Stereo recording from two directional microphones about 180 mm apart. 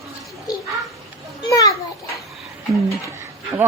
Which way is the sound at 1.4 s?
20° left (ahead or behind).